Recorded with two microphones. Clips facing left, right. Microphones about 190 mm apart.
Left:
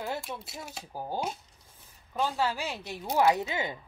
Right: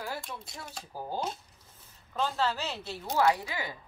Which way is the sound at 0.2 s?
5° left (ahead or behind).